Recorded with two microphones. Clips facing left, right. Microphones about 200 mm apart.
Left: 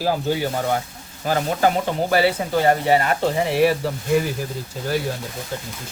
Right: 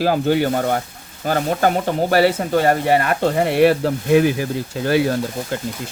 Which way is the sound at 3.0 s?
55° right (ahead or behind).